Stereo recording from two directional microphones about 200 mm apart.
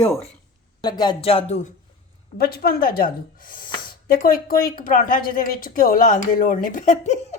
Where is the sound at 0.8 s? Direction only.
20° left (ahead or behind).